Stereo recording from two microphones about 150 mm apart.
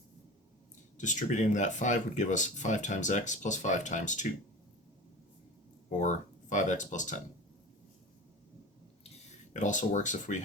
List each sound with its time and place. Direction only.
0.9 s speech: 55° left (ahead or behind)
5.9 s speech: 55° left (ahead or behind)
9.5 s speech: 55° left (ahead or behind)